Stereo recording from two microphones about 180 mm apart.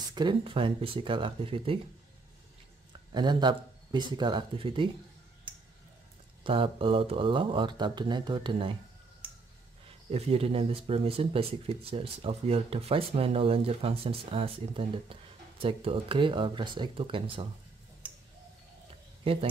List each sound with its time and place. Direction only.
0.1 s speech: 25° right (ahead or behind)
3.1 s speech: 25° right (ahead or behind)
6.4 s speech: 30° right (ahead or behind)
10.1 s speech: 35° right (ahead or behind)
19.2 s speech: 30° right (ahead or behind)